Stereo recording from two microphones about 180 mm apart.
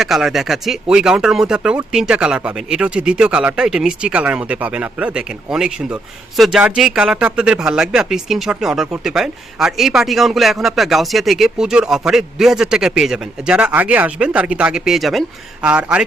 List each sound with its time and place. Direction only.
0.0 s a man's voice: centre (ahead or behind)